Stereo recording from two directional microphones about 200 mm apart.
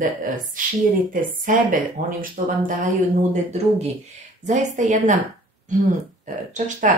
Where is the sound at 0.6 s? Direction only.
45° right (ahead or behind).